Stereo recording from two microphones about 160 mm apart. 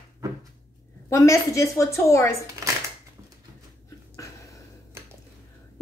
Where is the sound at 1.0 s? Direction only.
20° left (ahead or behind).